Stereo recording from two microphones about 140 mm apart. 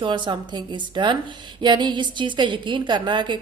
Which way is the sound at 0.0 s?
35° right (ahead or behind).